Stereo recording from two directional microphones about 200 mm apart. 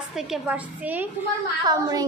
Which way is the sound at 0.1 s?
Centre (ahead or behind).